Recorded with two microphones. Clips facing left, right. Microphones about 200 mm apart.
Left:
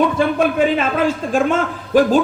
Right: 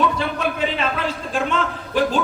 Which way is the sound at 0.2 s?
50° left (ahead or behind).